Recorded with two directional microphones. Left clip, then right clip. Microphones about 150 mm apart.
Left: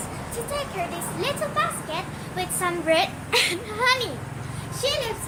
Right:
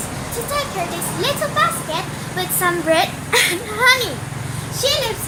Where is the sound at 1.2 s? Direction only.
10° left (ahead or behind).